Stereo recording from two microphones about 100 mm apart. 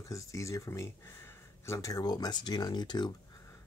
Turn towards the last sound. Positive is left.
turn(degrees=45)  # may be behind; listen again after turning